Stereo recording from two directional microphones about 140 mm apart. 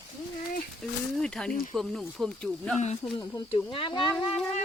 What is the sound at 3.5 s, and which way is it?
Speech, 40° left (ahead or behind).